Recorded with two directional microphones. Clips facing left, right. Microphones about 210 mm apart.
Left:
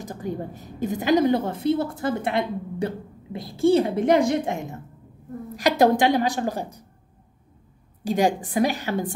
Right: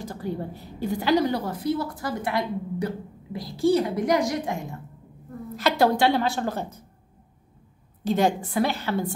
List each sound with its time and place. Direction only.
0.0 s a woman's voice: 20° left (ahead or behind)
8.0 s a woman's voice: 15° left (ahead or behind)